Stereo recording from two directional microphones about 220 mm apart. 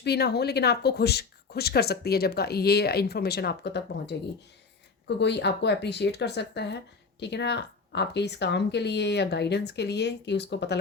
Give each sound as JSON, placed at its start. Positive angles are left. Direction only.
{"t": 0.0, "sound": "speech", "side_deg": 50}